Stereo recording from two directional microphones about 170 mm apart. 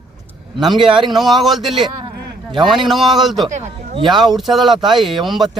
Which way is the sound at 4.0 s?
25° right (ahead or behind).